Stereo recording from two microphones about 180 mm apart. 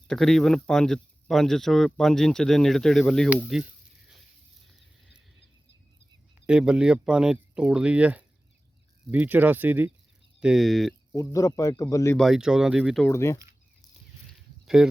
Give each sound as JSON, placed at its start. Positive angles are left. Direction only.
{"t": 0.1, "sound": "speech", "side_deg": 0}
{"t": 4.6, "sound": "a sound", "side_deg": 0}
{"t": 6.4, "sound": "speech", "side_deg": -5}
{"t": 11.1, "sound": "a man's voice", "side_deg": 15}
{"t": 12.1, "sound": "speech", "side_deg": 0}
{"t": 13.1, "sound": "speech", "side_deg": 15}
{"t": 14.8, "sound": "speech", "side_deg": -5}